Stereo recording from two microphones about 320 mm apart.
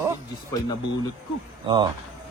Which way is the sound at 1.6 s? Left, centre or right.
Centre.